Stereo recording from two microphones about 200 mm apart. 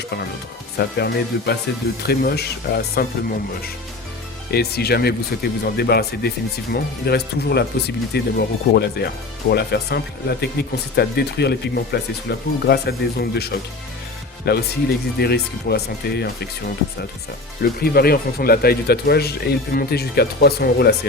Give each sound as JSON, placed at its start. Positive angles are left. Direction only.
{"t": 0.8, "sound": "speech", "side_deg": 55}
{"t": 4.5, "sound": "speech", "side_deg": 50}